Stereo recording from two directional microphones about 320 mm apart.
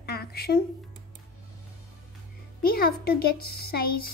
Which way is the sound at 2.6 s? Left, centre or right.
Left.